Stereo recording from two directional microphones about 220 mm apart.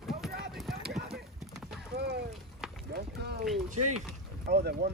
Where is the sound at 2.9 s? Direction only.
50° right (ahead or behind).